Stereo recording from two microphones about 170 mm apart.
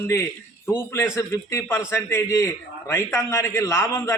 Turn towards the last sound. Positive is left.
turn(degrees=15)  # may be behind; listen again after turning